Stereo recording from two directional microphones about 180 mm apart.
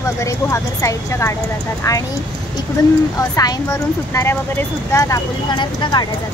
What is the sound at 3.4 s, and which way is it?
Speech, 20° left (ahead or behind).